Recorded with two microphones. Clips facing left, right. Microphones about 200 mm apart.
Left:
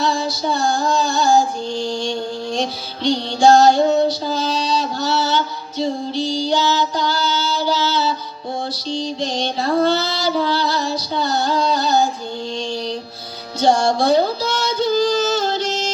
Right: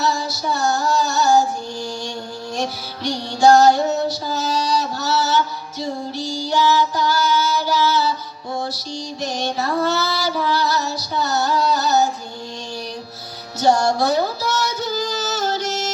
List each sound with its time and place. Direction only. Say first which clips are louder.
0.0 s female singing: left 2 dB; 25° left (ahead or behind)
2.6 s music: left 2 dB; 25° left (ahead or behind)
6.5 s child singing: right 4 dB; 25° left (ahead or behind)
8.9 s music: left 4 dB; 25° left (ahead or behind)
9.8 s female singing: left 3 dB; 20° left (ahead or behind)
13.6 s child singing: left 1 dB; 25° left (ahead or behind)